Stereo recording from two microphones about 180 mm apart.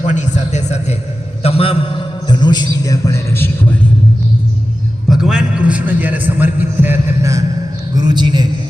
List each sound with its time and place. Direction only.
0.0 s a man's voice: 40° left (ahead or behind); by 3.7 s 10° left (ahead or behind)
5.0 s a man's voice: 5° right (ahead or behind); by 8.4 s 25° right (ahead or behind)